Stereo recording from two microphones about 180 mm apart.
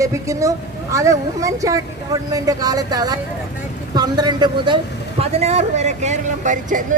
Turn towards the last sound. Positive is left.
turn(degrees=-45)  # may be behind; listen again after turning